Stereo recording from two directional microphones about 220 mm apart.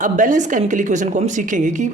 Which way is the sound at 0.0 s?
35° right (ahead or behind).